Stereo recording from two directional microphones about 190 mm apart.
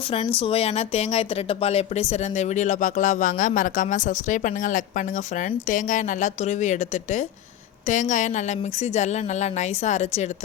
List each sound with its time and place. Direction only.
0.3 s speech: 30° left (ahead or behind)